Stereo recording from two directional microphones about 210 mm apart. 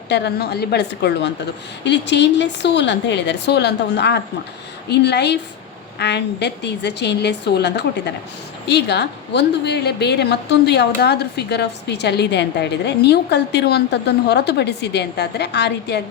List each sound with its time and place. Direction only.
0.1 s a woman's voice: 50° left (ahead or behind)